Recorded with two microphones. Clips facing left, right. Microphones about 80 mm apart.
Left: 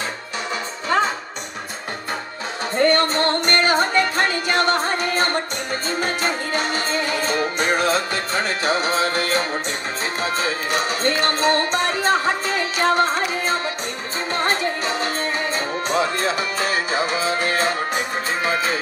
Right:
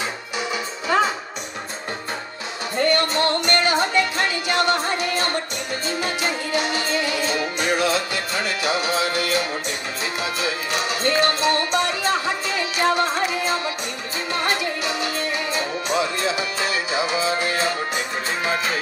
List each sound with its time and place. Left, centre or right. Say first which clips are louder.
2.7 s music: left 3 dB; left